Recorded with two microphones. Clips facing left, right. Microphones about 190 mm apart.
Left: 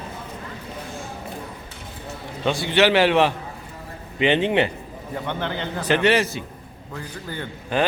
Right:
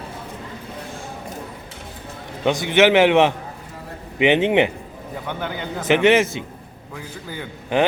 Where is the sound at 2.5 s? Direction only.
20° right (ahead or behind).